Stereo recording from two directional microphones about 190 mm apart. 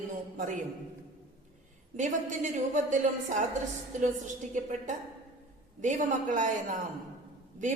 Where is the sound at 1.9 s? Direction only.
40° right (ahead or behind).